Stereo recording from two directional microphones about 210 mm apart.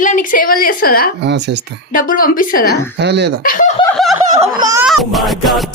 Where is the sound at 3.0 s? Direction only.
55° right (ahead or behind).